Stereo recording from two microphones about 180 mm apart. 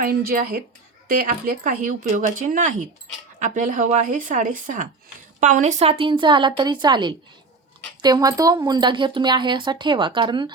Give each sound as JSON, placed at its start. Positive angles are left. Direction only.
{"t": 0.0, "sound": "speech", "side_deg": -55}